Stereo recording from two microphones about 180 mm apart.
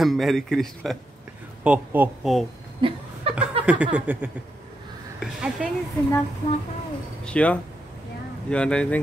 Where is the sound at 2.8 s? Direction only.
30° right (ahead or behind).